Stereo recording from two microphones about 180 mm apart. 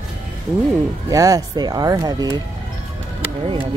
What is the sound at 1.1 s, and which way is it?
Speech, 20° right (ahead or behind).